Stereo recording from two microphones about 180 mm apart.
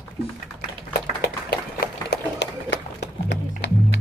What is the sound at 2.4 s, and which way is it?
Music, 75° left (ahead or behind).